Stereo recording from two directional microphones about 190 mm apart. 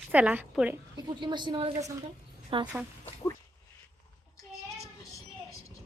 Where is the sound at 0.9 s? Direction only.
25° right (ahead or behind).